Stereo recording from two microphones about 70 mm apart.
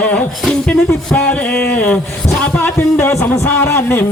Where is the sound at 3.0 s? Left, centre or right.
Left.